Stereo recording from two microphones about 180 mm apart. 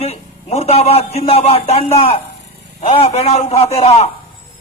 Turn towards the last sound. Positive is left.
turn(degrees=35)  # may be behind; listen again after turning